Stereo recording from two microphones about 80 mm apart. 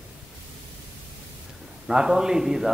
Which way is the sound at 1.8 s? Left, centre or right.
Centre.